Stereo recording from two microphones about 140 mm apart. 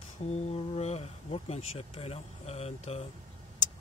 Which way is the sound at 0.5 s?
50° left (ahead or behind).